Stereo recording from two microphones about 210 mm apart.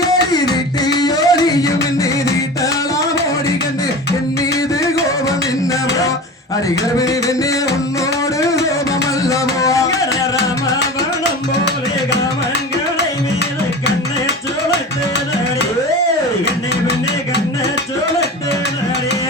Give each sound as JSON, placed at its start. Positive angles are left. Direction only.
{"t": 0.9, "sound": "music", "side_deg": 20}
{"t": 9.3, "sound": "music", "side_deg": 15}